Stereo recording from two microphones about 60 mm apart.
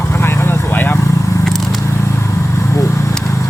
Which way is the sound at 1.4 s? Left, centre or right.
Centre.